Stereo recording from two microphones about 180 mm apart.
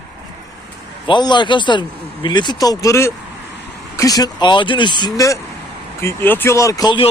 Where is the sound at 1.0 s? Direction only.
25° left (ahead or behind).